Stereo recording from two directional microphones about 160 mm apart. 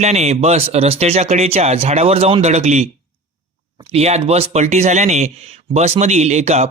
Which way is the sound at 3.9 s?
40° right (ahead or behind).